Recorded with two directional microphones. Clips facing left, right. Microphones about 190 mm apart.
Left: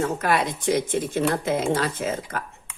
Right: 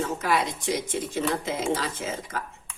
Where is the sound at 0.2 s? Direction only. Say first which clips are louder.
Left 3 dB; 55° left (ahead or behind).